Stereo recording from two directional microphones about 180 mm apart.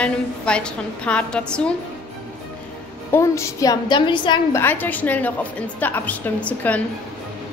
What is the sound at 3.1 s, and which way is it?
A woman's voice, 15° left (ahead or behind).